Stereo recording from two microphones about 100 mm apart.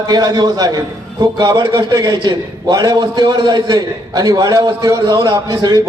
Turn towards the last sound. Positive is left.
turn(degrees=-35)  # may be behind; listen again after turning